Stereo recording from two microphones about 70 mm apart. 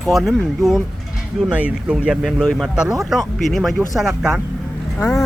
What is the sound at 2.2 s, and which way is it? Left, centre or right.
Speech, centre.